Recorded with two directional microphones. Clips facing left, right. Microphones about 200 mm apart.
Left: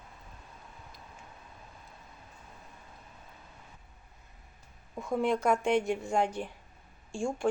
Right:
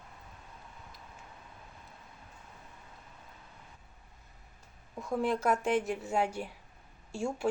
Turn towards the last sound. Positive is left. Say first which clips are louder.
# left 1 dB
turn(degrees=-5)  # may be behind; listen again after turning